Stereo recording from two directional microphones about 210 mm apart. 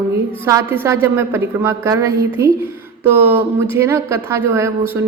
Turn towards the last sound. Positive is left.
turn(degrees=-10)  # may be behind; listen again after turning